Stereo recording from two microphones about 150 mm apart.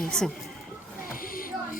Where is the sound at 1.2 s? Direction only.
70° left (ahead or behind).